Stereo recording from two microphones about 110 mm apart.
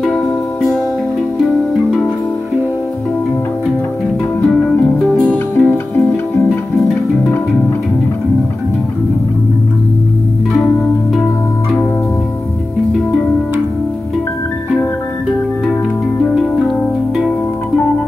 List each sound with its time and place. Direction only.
0.0 s music: centre (ahead or behind)
5.7 s music: 25° left (ahead or behind)
16.3 s music: centre (ahead or behind)